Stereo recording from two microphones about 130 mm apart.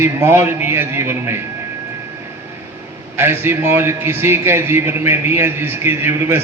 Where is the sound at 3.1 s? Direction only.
20° right (ahead or behind).